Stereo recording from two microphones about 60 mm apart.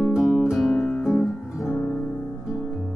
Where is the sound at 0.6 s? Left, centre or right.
Centre.